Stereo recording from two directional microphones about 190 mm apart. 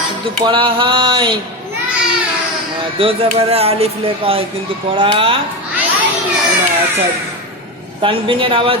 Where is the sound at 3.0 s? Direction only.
30° right (ahead or behind).